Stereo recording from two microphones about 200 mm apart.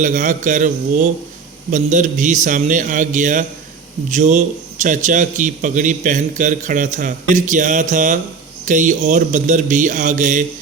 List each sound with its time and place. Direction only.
0.0 s a man's voice: 40° right (ahead or behind)